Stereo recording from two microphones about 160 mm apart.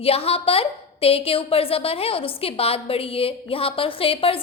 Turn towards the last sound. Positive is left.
turn(degrees=35)  # may be behind; listen again after turning